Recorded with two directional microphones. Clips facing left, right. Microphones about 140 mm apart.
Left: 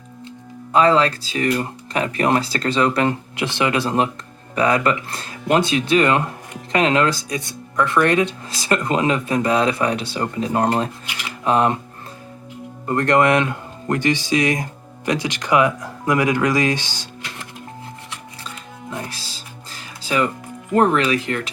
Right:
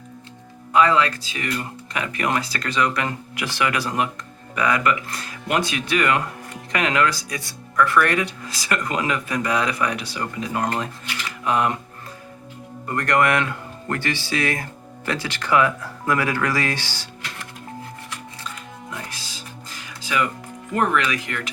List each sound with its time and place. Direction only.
0.7 s speech: 30° left (ahead or behind)
12.8 s speech: 25° left (ahead or behind)
18.9 s music: 30° left (ahead or behind)
20.7 s speech: 35° left (ahead or behind)